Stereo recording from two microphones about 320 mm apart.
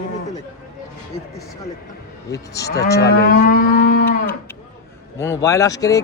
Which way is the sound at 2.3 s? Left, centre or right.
Centre.